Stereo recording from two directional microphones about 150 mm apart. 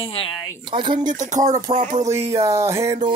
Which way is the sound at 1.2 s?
55° right (ahead or behind).